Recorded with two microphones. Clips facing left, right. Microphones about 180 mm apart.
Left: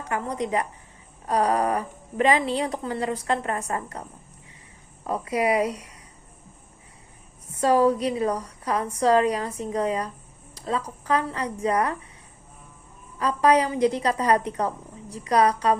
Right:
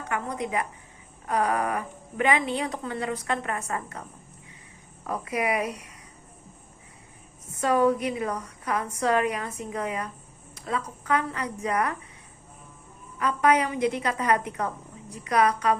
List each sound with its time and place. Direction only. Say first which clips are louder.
0.1 s a woman's voice: left 3 dB; 35° left (ahead or behind)
5.0 s speech: left 4 dB; 30° left (ahead or behind)
7.5 s a woman's voice: left 3 dB; 30° left (ahead or behind)
13.1 s a woman's voice: left 3 dB; 30° left (ahead or behind)